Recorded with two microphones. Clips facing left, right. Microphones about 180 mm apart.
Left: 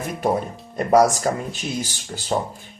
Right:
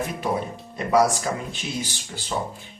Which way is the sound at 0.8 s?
45° left (ahead or behind).